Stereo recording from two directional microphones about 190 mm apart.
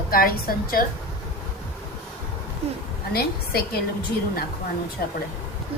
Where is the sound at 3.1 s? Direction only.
55° left (ahead or behind).